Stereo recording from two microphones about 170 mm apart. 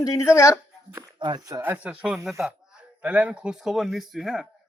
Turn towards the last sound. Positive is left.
turn(degrees=0)  # may be behind; listen again after turning